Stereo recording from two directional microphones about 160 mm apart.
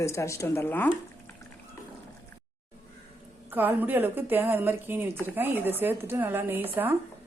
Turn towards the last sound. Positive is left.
turn(degrees=-15)  # may be behind; listen again after turning